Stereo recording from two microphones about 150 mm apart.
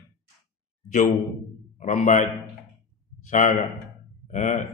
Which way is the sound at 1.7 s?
55° left (ahead or behind).